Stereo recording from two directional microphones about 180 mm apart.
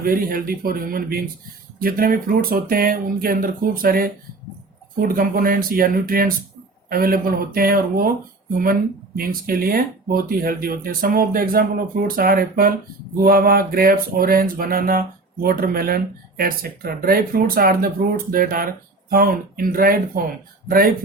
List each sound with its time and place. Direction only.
0.0 s speech: 55° right (ahead or behind)